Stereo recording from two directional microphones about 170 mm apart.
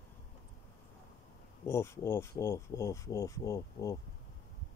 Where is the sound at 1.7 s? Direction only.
15° left (ahead or behind).